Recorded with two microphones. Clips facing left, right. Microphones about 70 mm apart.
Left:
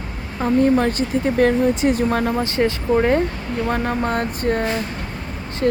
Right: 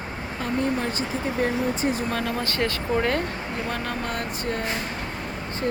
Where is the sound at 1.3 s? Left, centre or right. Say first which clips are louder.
Left 9 dB; left.